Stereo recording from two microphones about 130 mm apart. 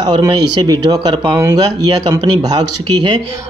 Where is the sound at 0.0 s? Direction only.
30° right (ahead or behind).